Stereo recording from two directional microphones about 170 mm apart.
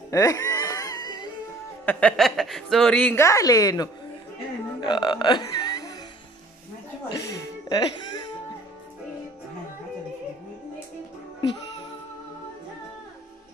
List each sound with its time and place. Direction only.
0.1 s wail: 20° left (ahead or behind)
1.9 s speech: 5° left (ahead or behind)
3.3 s a woman's voice: 20° left (ahead or behind)
4.7 s music: 25° left (ahead or behind)
7.1 s music: 20° left (ahead or behind)